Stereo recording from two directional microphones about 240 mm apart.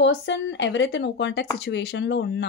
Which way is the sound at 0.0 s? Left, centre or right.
Left.